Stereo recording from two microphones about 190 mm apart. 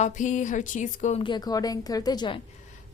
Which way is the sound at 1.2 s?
25° left (ahead or behind).